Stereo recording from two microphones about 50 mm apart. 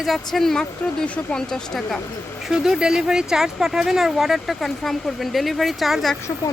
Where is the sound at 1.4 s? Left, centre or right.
Centre.